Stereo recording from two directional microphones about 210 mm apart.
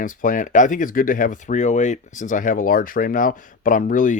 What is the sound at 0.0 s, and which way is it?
Speech, 40° left (ahead or behind).